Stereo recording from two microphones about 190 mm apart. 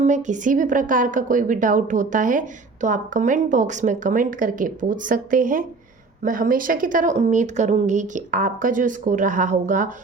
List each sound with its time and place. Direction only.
0.0 s a woman's voice: 40° right (ahead or behind)